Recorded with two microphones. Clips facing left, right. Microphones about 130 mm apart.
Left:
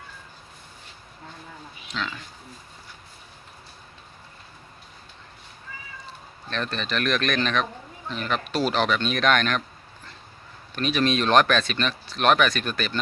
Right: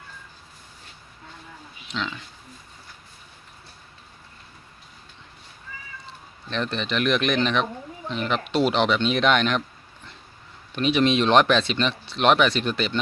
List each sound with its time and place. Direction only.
1.9 s speech: 20° right (ahead or behind)
6.5 s speech: 20° right (ahead or behind)
10.8 s speech: 20° right (ahead or behind)